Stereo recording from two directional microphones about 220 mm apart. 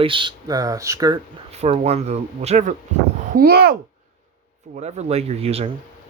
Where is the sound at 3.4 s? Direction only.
45° right (ahead or behind).